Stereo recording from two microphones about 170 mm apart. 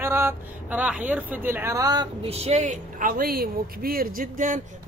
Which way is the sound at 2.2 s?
40° right (ahead or behind).